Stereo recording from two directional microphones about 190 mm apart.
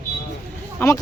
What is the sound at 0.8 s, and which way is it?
Speech, 10° left (ahead or behind).